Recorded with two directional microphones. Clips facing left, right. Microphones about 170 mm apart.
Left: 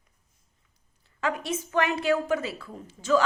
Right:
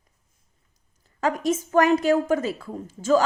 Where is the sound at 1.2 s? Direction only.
45° right (ahead or behind).